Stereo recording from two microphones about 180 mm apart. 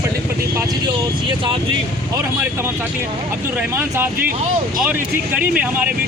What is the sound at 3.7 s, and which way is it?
Speech, 10° right (ahead or behind).